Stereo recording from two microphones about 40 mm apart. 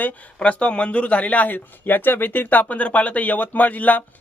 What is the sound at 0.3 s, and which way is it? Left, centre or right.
Speech, left.